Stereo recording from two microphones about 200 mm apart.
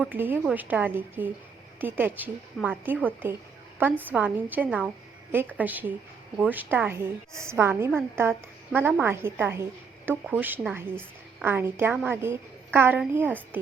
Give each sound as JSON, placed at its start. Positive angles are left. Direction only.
{"t": 0.0, "sound": "a woman's voice", "side_deg": -10}